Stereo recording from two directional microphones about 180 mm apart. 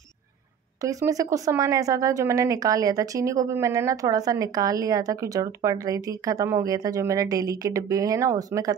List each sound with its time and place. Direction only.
0.8 s speech: 20° right (ahead or behind)